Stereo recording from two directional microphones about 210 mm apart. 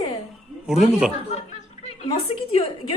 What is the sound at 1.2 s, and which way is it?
Chuckle, 30° left (ahead or behind).